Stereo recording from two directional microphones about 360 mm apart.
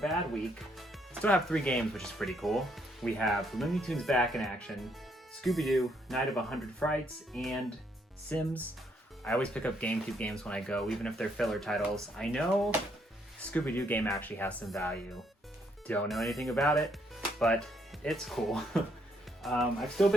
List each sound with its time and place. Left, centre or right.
0.8 s speech: centre
13.5 s speech: centre